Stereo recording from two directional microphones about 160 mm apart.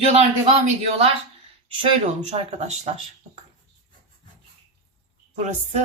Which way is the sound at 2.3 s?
40° right (ahead or behind).